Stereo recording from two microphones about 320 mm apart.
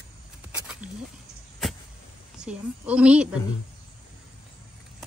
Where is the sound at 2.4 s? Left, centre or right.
Centre.